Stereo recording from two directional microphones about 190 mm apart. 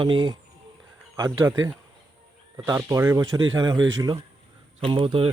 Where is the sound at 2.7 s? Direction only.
20° right (ahead or behind).